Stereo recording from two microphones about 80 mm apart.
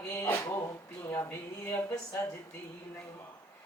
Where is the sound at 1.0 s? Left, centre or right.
Left.